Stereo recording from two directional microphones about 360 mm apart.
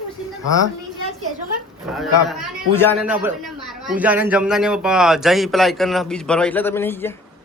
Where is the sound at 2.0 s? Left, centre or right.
Centre.